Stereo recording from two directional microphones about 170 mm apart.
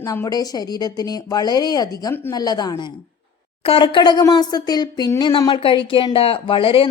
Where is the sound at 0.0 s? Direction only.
20° left (ahead or behind).